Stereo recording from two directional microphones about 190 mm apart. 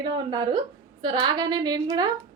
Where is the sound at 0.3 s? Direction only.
25° right (ahead or behind).